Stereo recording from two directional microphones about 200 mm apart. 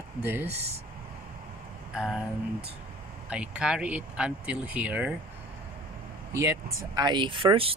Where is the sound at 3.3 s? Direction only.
5° right (ahead or behind).